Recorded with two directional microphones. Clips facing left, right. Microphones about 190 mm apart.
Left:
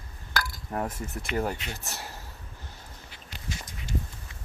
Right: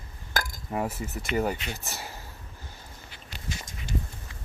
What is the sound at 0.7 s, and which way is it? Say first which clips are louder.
Speech: right 2 dB; 5° right (ahead or behind).